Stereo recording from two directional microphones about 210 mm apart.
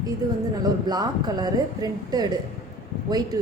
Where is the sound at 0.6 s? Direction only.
20° right (ahead or behind).